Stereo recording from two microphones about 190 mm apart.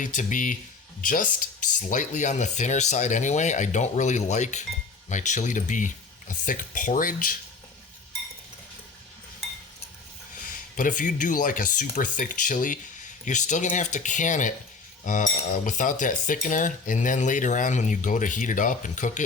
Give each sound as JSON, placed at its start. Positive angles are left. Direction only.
{"t": 0.0, "sound": "speech", "side_deg": 40}
{"t": 5.0, "sound": "cutlery", "side_deg": 40}
{"t": 10.4, "sound": "cutlery", "side_deg": 45}
{"t": 13.2, "sound": "speech", "side_deg": 40}
{"t": 15.0, "sound": "cutlery", "side_deg": 40}